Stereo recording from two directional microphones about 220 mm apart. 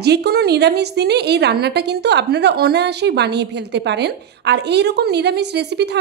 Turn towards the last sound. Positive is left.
turn(degrees=-50)  # may be behind; listen again after turning